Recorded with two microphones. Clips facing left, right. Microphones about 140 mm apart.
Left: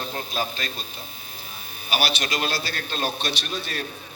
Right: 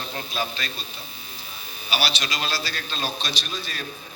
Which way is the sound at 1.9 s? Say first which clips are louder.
Left 2 dB; 50° left (ahead or behind).